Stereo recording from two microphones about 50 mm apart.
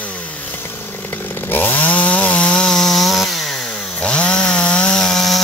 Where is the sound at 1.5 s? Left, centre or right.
Left.